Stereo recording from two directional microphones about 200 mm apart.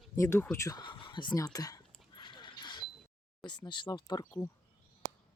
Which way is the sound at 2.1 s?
25° left (ahead or behind).